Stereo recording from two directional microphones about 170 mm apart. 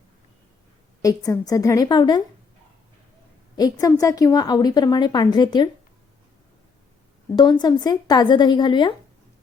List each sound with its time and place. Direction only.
1.0 s a woman's voice: 20° left (ahead or behind)
3.5 s a woman's voice: 20° left (ahead or behind)
7.3 s a woman's voice: 20° left (ahead or behind)